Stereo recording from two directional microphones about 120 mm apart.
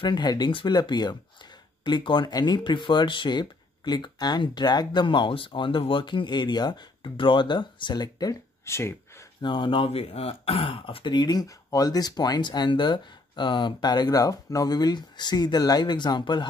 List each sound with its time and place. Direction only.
0.0 s speech: 40° left (ahead or behind); by 9.2 s 20° left (ahead or behind)
9.4 s speech: 45° left (ahead or behind)